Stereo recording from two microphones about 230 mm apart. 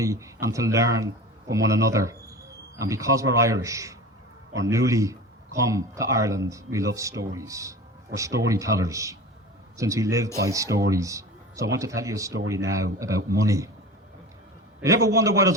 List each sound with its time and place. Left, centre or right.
0.0 s speech: centre
14.8 s speech: centre